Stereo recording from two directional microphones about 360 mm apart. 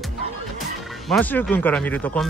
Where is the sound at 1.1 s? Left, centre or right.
Centre.